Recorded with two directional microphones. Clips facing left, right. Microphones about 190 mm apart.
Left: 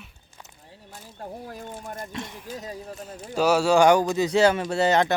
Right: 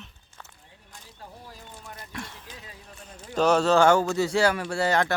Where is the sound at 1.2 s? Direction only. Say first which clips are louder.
Left 9 dB; 55° left (ahead or behind).